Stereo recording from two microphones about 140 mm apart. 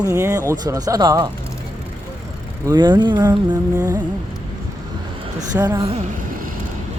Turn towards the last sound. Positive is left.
turn(degrees=-15)  # may be behind; listen again after turning